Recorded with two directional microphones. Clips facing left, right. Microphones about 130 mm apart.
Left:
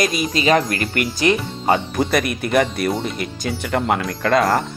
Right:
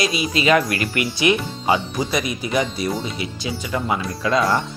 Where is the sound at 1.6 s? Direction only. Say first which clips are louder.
Left 3 dB; 55° left (ahead or behind).